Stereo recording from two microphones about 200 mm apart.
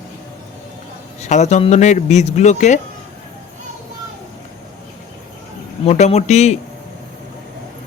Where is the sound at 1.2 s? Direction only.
35° left (ahead or behind).